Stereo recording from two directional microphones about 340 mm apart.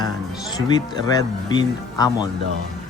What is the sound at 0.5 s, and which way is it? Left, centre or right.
Speech, centre.